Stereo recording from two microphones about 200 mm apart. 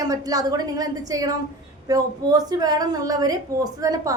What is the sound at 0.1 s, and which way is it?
A woman's voice, 20° right (ahead or behind).